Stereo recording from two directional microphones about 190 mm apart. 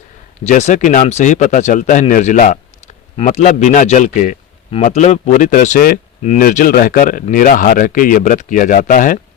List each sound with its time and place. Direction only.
0.4 s speech: 40° left (ahead or behind)